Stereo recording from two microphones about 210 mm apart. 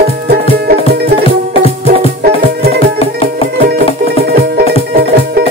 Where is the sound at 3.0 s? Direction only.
25° left (ahead or behind).